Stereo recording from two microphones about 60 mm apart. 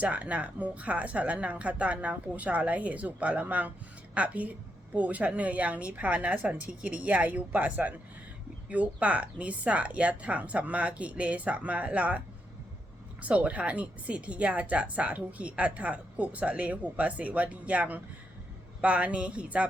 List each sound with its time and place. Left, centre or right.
0.0 s speech: right
13.2 s speech: right